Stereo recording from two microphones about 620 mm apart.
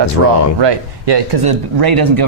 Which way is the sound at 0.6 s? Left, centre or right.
Right.